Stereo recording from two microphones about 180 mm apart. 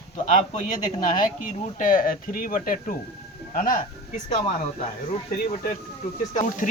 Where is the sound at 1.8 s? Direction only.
50° left (ahead or behind).